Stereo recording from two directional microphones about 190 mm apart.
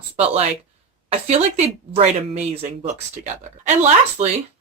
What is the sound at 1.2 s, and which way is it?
Speech, 35° right (ahead or behind).